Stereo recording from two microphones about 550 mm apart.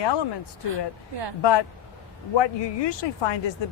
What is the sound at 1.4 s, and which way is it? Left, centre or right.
Speech, left.